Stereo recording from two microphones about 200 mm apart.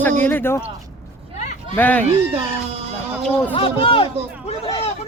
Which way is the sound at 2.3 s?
30° right (ahead or behind).